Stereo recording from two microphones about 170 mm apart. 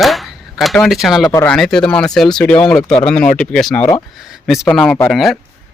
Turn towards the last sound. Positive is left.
turn(degrees=0)  # may be behind; listen again after turning